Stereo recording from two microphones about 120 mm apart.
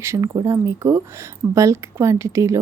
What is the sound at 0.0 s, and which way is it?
Speech, 25° right (ahead or behind).